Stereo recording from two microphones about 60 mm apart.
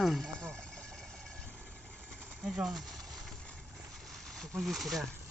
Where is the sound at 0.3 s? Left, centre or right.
Centre.